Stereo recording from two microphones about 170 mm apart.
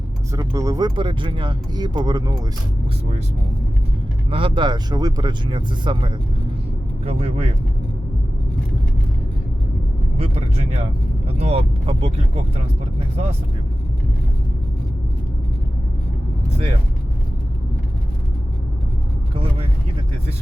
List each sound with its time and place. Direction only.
0.3 s speech: 20° right (ahead or behind)
4.3 s speech: 30° right (ahead or behind)
10.2 s speech: 35° right (ahead or behind)
19.3 s speech: 35° right (ahead or behind)